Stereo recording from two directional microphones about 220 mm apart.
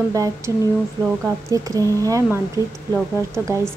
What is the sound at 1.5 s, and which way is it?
A woman's voice, 15° right (ahead or behind).